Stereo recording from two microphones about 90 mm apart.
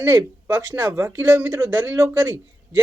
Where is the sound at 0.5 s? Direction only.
20° right (ahead or behind).